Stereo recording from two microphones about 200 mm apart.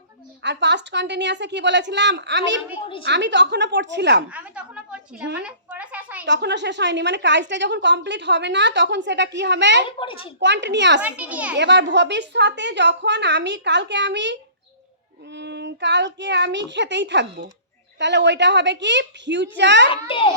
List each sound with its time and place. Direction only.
0.4 s a woman's voice: 60° right (ahead or behind)
4.3 s speech: 5° right (ahead or behind)
5.4 s a sound: 5° right (ahead or behind)
6.2 s a woman's voice: 60° right (ahead or behind)
10.0 s a child's voice: 25° left (ahead or behind)
10.4 s a woman's voice: 60° right (ahead or behind)
11.0 s a child's voice: 5° right (ahead or behind)
11.5 s a woman's voice: 60° right (ahead or behind)
15.4 s a woman's voice: 60° right (ahead or behind)
19.9 s a child's voice: 25° left (ahead or behind)